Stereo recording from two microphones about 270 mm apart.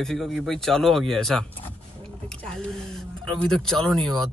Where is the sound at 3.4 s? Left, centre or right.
Centre.